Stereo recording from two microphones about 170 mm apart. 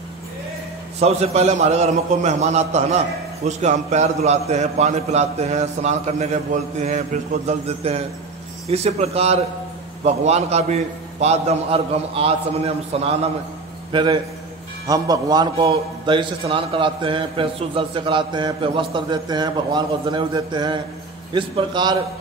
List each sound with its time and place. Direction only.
0.9 s a man's voice: 40° right (ahead or behind)